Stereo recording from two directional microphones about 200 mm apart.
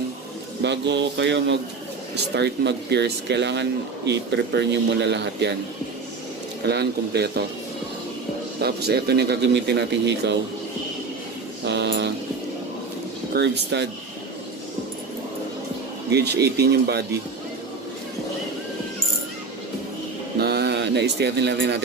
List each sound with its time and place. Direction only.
0.6 s speech: 60° right (ahead or behind)
6.7 s speech: 55° right (ahead or behind)
8.5 s speech: 55° right (ahead or behind)
11.6 s speech: 60° right (ahead or behind)
13.3 s speech: 60° right (ahead or behind)
16.1 s speech: 55° right (ahead or behind)
20.3 s a sound: 55° right (ahead or behind)